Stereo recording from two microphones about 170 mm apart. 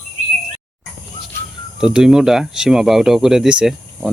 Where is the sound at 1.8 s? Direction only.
5° right (ahead or behind).